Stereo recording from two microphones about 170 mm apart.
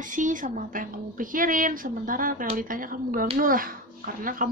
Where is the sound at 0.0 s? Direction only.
50° right (ahead or behind).